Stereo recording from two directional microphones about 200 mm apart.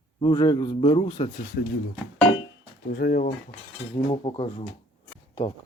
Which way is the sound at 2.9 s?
50° left (ahead or behind).